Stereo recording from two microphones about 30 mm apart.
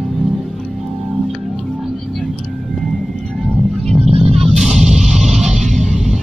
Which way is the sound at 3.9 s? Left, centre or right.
Right.